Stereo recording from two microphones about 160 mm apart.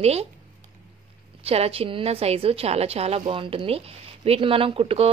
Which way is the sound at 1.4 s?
40° right (ahead or behind).